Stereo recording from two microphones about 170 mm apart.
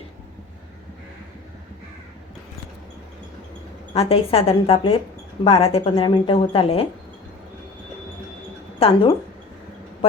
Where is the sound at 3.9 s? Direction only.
35° left (ahead or behind).